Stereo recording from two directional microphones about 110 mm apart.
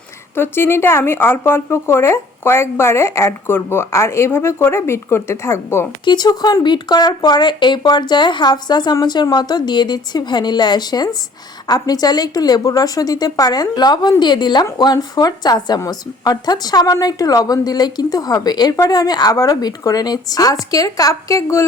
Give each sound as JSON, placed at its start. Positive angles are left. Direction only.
{"t": 0.3, "sound": "speech", "side_deg": 20}
{"t": 6.1, "sound": "a woman's voice", "side_deg": 40}